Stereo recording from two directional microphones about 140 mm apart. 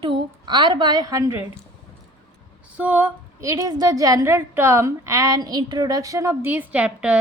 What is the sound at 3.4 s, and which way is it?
A woman's voice, 25° right (ahead or behind).